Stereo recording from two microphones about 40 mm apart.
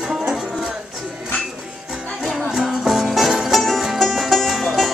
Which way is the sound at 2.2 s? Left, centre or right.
Centre.